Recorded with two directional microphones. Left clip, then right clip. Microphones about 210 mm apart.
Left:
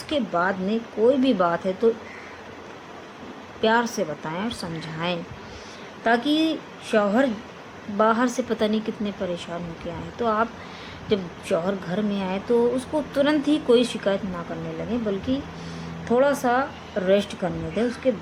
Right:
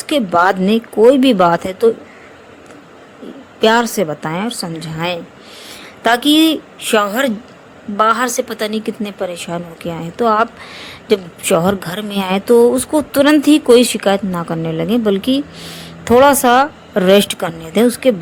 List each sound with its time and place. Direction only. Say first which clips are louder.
0.1 s a woman's voice: right 11 dB; 45° right (ahead or behind)
3.6 s a woman's voice: right 9 dB; 40° right (ahead or behind)
6.0 s a woman's voice: right 10 dB; 45° right (ahead or behind)